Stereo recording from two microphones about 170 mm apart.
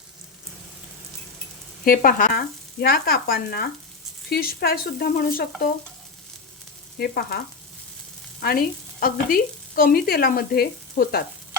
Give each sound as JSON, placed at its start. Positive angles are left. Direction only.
{"t": 1.8, "sound": "speech", "side_deg": 55}
{"t": 7.0, "sound": "speech", "side_deg": 65}
{"t": 8.4, "sound": "frying", "side_deg": 60}